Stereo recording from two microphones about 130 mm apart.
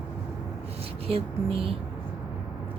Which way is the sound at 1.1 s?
45° right (ahead or behind).